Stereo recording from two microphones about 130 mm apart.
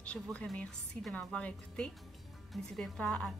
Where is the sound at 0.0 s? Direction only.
10° left (ahead or behind).